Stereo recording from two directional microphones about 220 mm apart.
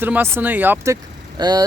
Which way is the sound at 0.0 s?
10° right (ahead or behind).